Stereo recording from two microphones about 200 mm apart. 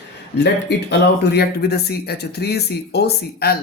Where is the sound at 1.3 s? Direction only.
55° left (ahead or behind).